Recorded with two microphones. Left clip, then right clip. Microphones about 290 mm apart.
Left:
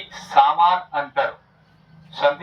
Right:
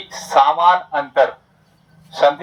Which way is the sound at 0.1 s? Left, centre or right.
Centre.